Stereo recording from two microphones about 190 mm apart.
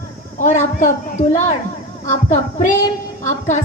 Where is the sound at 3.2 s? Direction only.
40° left (ahead or behind).